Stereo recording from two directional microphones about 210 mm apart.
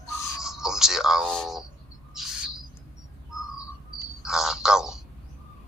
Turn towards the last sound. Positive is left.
turn(degrees=0)  # may be behind; listen again after turning